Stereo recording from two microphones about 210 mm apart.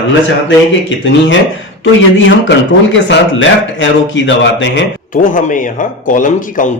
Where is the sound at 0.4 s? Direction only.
60° left (ahead or behind).